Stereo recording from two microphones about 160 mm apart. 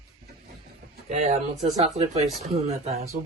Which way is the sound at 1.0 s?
50° right (ahead or behind).